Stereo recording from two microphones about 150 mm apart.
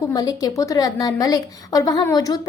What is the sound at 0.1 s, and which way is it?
A woman's voice, 25° left (ahead or behind).